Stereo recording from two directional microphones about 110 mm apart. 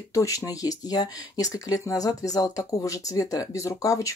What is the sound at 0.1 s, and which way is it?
Speech, 30° left (ahead or behind).